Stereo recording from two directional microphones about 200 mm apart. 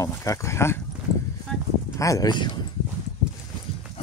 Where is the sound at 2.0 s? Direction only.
15° left (ahead or behind).